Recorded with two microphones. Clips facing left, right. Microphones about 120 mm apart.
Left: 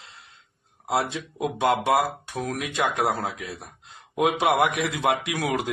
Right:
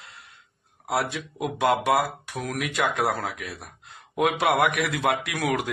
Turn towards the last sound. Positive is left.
turn(degrees=25)  # may be behind; listen again after turning